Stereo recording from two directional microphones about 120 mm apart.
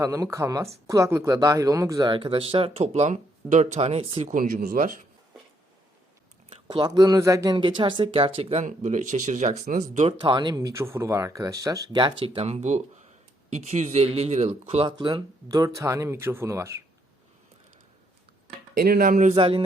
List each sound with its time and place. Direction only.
0.0 s speech: 25° right (ahead or behind)
2.0 s speech: 45° right (ahead or behind); by 5.0 s 90° right
6.7 s speech: 35° right (ahead or behind)
7.5 s speech: 40° right (ahead or behind)
8.6 s speech: 90° right; by 10.2 s 70° right (ahead or behind)
10.2 s speech: 35° right (ahead or behind)
12.2 s speech: 55° right (ahead or behind)
14.8 s speech: 40° right (ahead or behind)
19.3 s speech: 50° right (ahead or behind)